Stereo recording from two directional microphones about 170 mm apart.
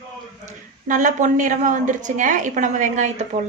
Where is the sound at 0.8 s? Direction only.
50° right (ahead or behind).